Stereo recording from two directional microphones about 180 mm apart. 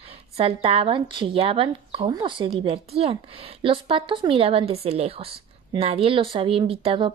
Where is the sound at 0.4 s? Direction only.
35° right (ahead or behind).